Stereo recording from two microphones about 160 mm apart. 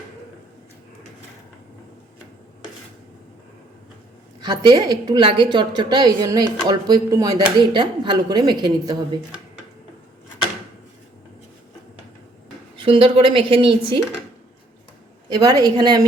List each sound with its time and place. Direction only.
4.4 s a woman's voice: 30° right (ahead or behind)
12.8 s speech: 35° right (ahead or behind)
15.3 s a woman's voice: 25° right (ahead or behind)